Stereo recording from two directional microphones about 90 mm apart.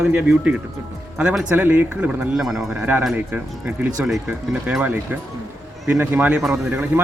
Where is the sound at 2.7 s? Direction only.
20° right (ahead or behind).